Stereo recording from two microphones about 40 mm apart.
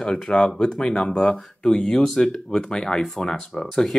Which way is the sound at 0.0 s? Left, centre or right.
Centre.